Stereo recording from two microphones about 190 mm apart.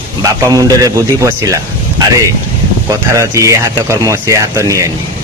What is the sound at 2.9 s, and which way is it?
Speech, 15° right (ahead or behind).